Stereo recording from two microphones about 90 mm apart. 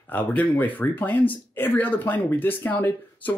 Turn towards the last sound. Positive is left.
turn(degrees=20)  # may be behind; listen again after turning